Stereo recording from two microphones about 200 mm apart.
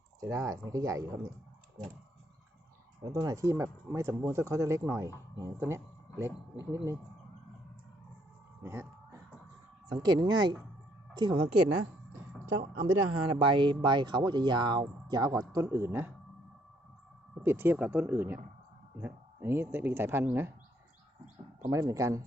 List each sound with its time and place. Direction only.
0.2 s speech: 15° right (ahead or behind)
3.0 s speech: 15° right (ahead or behind)
8.6 s music: 15° right (ahead or behind)
9.9 s speech: 20° right (ahead or behind)
12.9 s speech: 90° right
13.4 s speech: 25° right (ahead or behind)
17.4 s speech: 10° right (ahead or behind)
21.7 s speech: 15° right (ahead or behind)